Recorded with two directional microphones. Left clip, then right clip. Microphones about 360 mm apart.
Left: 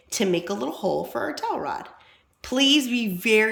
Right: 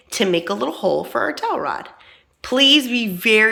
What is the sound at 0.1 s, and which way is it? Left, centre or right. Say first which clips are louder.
Speech: right 5 dB; centre.